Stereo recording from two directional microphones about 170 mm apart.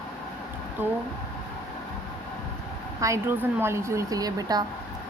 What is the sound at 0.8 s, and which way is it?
Speech, 10° right (ahead or behind).